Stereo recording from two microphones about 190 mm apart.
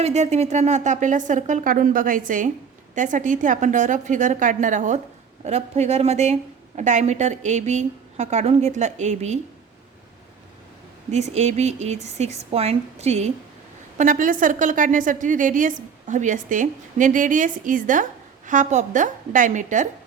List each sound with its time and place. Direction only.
0.0 s a woman's voice: 35° right (ahead or behind)
11.1 s a woman's voice: 35° right (ahead or behind)